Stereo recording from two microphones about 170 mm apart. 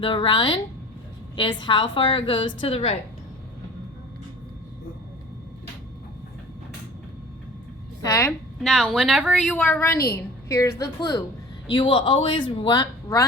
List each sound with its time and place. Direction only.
0.0 s speech: 30° left (ahead or behind)
8.0 s a woman's voice: 15° left (ahead or behind)
8.6 s a woman's voice: 5° right (ahead or behind); by 10.8 s 15° left (ahead or behind)
11.7 s speech: 30° left (ahead or behind)